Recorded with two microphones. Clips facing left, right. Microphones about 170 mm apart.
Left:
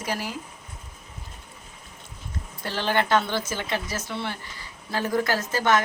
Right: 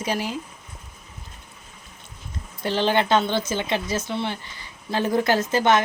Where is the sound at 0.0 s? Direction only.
20° right (ahead or behind).